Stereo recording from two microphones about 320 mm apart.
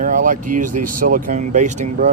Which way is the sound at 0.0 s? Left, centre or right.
Right.